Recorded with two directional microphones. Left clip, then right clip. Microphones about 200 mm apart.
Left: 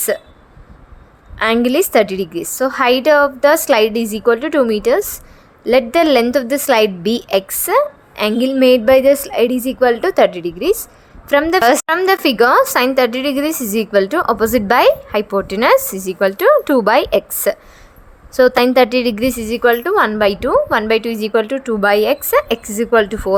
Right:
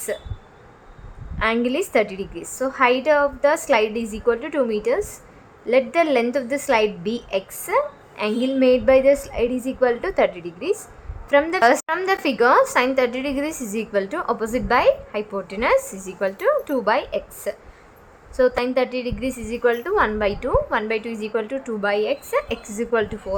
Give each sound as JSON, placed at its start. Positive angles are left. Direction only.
{"t": 1.4, "sound": "a woman's voice", "side_deg": 25}